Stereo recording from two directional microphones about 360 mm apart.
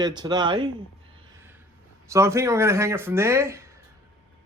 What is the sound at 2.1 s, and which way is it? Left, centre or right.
A man's voice, centre.